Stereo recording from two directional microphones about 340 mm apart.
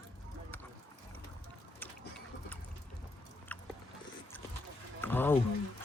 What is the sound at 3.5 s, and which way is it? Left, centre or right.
Biting, centre.